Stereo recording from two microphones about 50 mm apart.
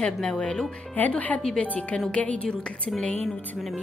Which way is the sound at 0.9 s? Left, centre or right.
Left.